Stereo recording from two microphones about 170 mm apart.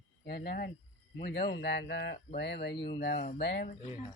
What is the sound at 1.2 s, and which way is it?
Speech, 85° left.